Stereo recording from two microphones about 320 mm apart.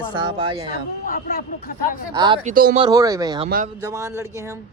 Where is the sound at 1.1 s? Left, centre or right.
Left.